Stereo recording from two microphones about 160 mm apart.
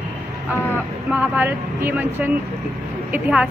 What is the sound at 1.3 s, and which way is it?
A woman's voice, 10° right (ahead or behind).